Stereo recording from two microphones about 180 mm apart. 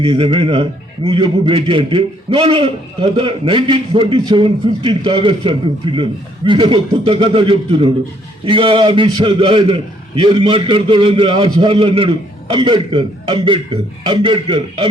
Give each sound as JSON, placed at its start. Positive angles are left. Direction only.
{"t": 0.0, "sound": "a man's voice", "side_deg": -25}